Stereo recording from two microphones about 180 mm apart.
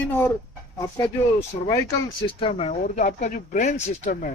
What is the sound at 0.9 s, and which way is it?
Speech, 15° left (ahead or behind).